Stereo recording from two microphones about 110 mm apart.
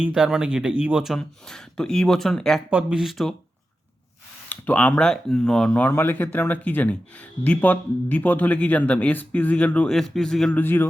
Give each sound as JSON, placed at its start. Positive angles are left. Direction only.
{"t": 0.0, "sound": "speech", "side_deg": -5}
{"t": 2.6, "sound": "speech", "side_deg": -10}
{"t": 4.4, "sound": "speech", "side_deg": 15}
{"t": 10.6, "sound": "a man's voice", "side_deg": 20}